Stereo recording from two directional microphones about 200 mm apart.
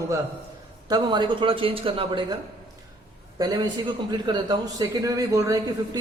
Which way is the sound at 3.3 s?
20° right (ahead or behind).